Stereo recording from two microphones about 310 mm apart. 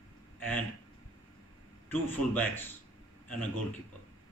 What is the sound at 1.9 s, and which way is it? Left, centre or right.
Speech, centre.